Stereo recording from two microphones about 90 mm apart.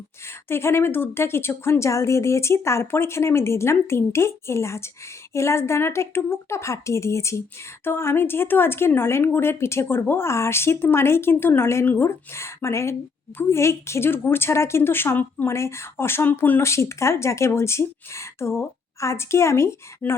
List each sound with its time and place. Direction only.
0.3 s a woman's voice: 25° left (ahead or behind)